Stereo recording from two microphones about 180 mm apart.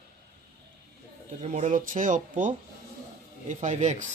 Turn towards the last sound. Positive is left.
turn(degrees=-40)  # may be behind; listen again after turning